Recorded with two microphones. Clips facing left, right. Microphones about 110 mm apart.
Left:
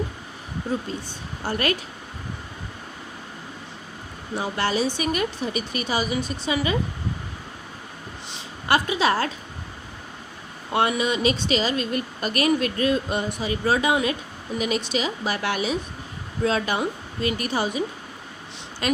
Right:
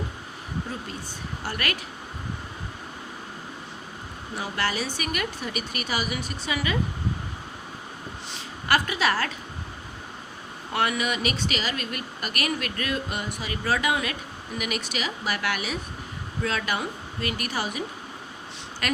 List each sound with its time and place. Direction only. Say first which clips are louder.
1.5 s speech: left 7 dB; 25° left (ahead or behind)
4.4 s speech: left 5 dB; 25° left (ahead or behind)
8.3 s a sound: left 2 dB; 25° left (ahead or behind)
10.7 s speech: left 4 dB; 25° left (ahead or behind)